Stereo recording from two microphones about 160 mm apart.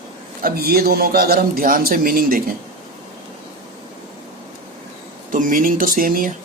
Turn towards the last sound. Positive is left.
turn(degrees=-60)  # may be behind; listen again after turning